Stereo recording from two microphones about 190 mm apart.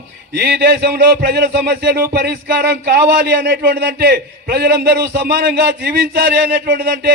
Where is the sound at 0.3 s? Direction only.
55° right (ahead or behind).